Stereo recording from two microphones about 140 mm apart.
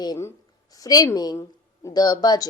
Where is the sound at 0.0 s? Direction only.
30° left (ahead or behind).